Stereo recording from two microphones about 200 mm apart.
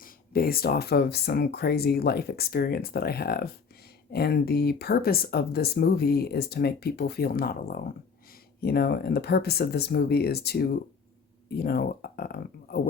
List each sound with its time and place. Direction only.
0.0 s speech: 45° left (ahead or behind)